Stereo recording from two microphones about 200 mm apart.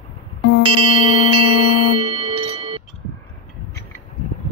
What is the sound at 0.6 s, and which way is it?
Music, 25° right (ahead or behind).